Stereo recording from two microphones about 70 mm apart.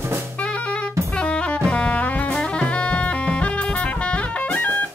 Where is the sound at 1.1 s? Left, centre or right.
Centre.